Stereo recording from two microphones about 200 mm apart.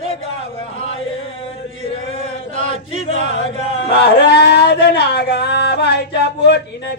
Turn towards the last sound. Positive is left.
turn(degrees=55)  # may be behind; listen again after turning